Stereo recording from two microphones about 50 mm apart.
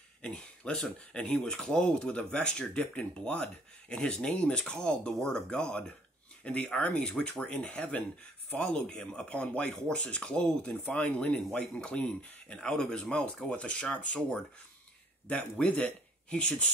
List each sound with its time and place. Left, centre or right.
0.2 s speech: left
15.2 s speech: left